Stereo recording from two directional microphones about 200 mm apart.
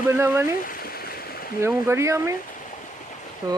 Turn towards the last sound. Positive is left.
turn(degrees=-15)  # may be behind; listen again after turning